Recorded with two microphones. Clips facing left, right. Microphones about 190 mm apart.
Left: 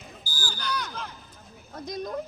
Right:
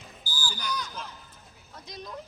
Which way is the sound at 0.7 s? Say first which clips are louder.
Left 4 dB; 65° left (ahead or behind).